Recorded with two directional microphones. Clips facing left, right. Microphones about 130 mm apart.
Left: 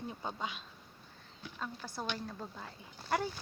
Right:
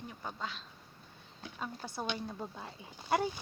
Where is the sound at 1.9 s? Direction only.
10° right (ahead or behind).